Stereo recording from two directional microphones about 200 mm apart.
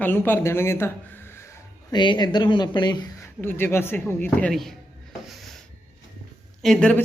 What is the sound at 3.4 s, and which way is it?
Speech, 10° left (ahead or behind).